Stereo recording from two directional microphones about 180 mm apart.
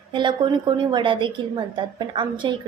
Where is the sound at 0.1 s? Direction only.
25° right (ahead or behind).